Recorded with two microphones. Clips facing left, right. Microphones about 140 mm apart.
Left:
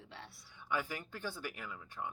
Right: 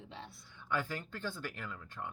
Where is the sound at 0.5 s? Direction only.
10° left (ahead or behind).